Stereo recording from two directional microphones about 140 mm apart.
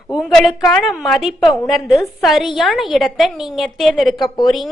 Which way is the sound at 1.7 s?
Centre (ahead or behind).